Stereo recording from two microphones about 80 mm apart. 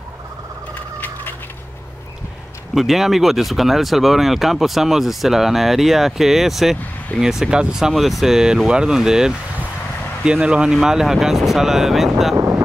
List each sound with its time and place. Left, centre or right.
2.7 s speech: centre
12.4 s wind noise: right